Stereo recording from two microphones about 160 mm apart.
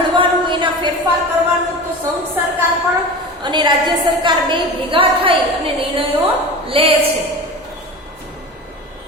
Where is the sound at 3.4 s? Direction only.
30° right (ahead or behind).